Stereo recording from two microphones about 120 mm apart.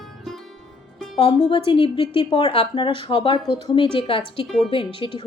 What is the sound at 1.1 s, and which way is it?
A woman's voice, 45° left (ahead or behind).